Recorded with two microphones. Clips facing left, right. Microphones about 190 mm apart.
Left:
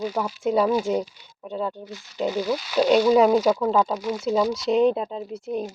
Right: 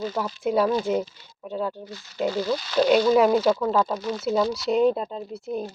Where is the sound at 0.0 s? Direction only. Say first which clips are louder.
Left 1 dB; 10° left (ahead or behind).